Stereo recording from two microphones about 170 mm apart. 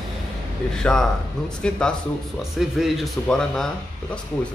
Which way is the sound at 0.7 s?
5° left (ahead or behind).